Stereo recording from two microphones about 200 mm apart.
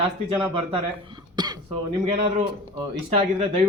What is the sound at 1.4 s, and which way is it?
Cough, 20° right (ahead or behind).